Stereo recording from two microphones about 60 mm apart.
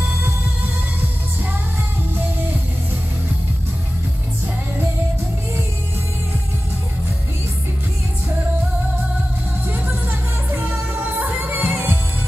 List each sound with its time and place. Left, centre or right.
10.0 s music: right